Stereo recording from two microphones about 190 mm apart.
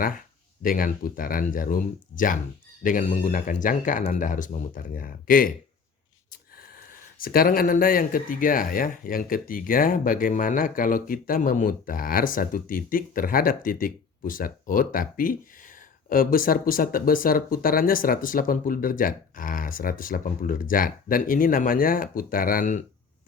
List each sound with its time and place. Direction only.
0.6 s speech: 45° left (ahead or behind)
6.6 s speech: 50° left (ahead or behind)